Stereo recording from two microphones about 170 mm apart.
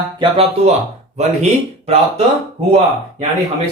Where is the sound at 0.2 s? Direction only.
35° right (ahead or behind).